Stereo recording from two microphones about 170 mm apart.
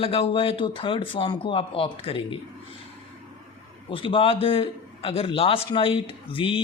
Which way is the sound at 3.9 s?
30° left (ahead or behind).